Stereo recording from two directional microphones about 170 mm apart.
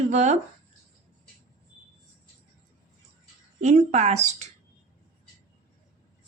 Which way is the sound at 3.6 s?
40° right (ahead or behind).